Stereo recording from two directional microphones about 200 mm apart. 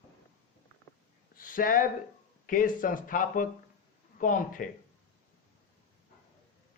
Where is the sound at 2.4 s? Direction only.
45° left (ahead or behind).